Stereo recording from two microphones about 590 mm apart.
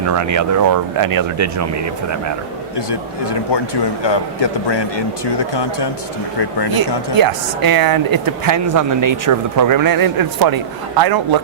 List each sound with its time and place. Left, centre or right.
0.0 s speech: right
2.7 s a man's voice: left
6.7 s speech: right